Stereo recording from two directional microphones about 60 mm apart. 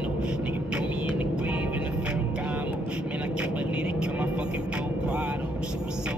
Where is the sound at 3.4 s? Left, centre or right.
Centre.